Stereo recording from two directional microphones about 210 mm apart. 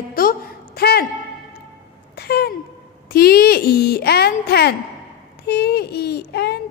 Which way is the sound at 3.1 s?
50° left (ahead or behind).